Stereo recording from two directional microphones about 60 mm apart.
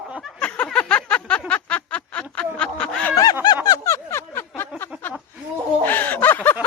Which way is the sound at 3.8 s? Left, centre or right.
Left.